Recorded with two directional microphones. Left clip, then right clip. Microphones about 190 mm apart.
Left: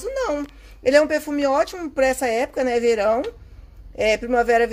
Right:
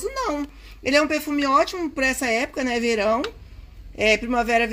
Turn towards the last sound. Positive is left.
turn(degrees=10)  # may be behind; listen again after turning